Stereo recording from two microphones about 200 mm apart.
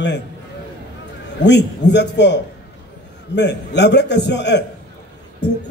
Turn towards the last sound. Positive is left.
turn(degrees=60)  # may be behind; listen again after turning